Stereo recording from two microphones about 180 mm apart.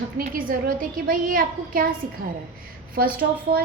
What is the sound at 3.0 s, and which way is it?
Speech, 55° right (ahead or behind).